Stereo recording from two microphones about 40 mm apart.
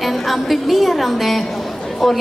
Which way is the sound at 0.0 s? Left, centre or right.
Centre.